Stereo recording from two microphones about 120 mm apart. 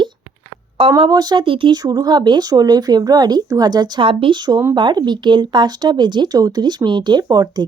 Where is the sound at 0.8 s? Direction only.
50° right (ahead or behind).